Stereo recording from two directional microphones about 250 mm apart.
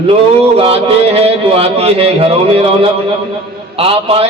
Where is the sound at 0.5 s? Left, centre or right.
Right.